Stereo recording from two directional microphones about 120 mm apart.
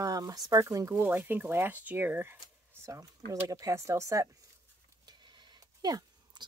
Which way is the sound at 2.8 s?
25° right (ahead or behind).